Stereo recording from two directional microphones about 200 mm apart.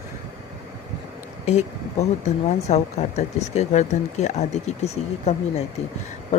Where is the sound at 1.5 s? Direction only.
35° left (ahead or behind).